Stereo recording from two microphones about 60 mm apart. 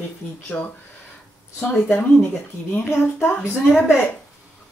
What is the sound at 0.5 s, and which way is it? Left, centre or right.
Speech, left.